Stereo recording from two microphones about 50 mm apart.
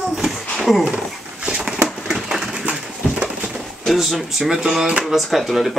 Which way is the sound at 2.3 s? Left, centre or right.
Centre.